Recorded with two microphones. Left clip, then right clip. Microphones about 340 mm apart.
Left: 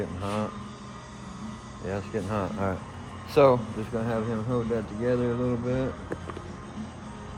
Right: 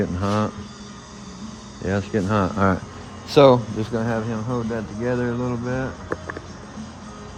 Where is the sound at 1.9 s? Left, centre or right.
Right.